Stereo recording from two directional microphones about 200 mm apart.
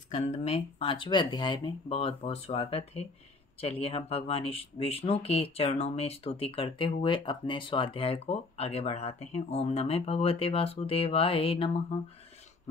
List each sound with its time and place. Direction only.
0.1 s speech: 35° left (ahead or behind)